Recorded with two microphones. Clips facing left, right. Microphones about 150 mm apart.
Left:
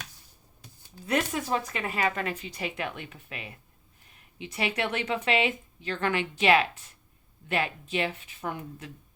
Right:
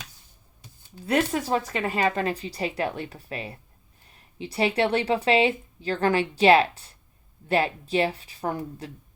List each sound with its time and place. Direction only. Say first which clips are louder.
1.0 s speech: right 4 dB; 30° right (ahead or behind)